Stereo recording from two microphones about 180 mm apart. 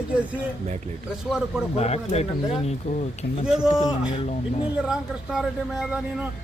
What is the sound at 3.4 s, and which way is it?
Speech, 5° right (ahead or behind).